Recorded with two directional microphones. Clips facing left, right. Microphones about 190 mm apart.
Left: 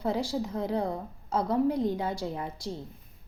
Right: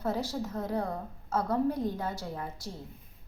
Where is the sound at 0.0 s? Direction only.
10° left (ahead or behind).